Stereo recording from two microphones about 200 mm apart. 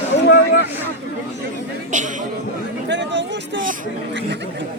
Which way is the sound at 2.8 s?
60° right (ahead or behind).